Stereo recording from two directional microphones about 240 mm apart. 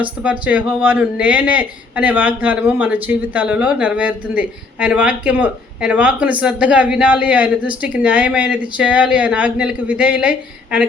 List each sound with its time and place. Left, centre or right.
0.0 s speech: centre